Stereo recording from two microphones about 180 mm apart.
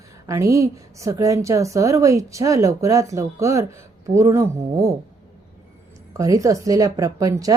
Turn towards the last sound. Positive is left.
turn(degrees=-20)  # may be behind; listen again after turning